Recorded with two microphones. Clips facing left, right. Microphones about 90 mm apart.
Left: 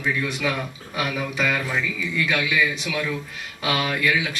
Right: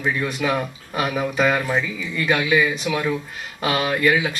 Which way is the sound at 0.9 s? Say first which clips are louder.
Right 4 dB; 40° right (ahead or behind).